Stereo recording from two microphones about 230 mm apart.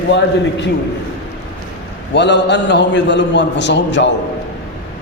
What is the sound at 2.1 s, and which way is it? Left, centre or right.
A man's voice, left.